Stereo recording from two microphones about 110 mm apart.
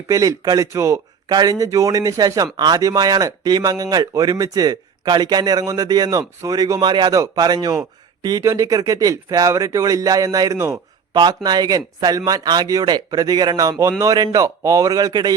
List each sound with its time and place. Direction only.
0.1 s speech: 30° right (ahead or behind)
11.1 s speech: 40° right (ahead or behind)